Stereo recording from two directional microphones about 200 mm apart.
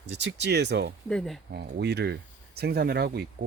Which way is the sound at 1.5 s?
55° right (ahead or behind).